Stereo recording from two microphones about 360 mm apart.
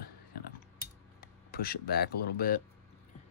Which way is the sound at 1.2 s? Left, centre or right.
Left.